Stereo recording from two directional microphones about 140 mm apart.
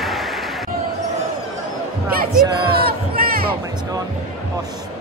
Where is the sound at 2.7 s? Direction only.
90° right.